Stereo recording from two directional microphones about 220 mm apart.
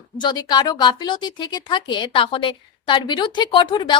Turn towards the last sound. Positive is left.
turn(degrees=20)  # may be behind; listen again after turning